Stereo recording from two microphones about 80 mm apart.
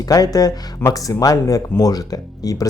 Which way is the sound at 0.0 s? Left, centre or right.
Left.